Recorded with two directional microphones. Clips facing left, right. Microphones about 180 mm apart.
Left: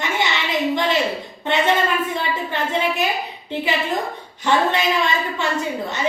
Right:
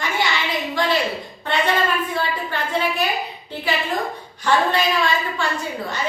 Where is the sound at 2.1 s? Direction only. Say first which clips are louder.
Even; 20° left (ahead or behind).